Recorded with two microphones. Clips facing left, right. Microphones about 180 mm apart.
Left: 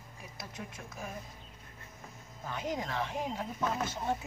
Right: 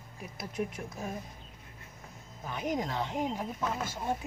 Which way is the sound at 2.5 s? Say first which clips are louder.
Right 3 dB; 15° right (ahead or behind).